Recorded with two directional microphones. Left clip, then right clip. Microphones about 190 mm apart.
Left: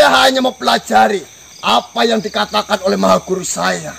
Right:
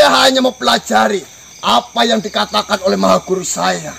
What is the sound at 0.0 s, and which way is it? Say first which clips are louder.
Speech: even; 5° right (ahead or behind).